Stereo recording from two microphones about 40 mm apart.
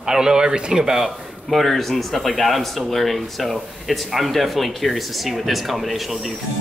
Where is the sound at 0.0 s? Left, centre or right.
Centre.